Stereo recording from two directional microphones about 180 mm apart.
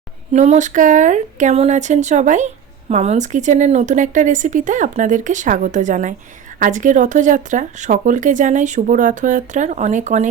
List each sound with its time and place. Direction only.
0.3 s speech: 40° right (ahead or behind)